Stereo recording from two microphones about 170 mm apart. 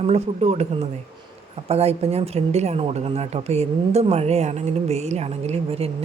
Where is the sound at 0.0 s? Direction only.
40° right (ahead or behind).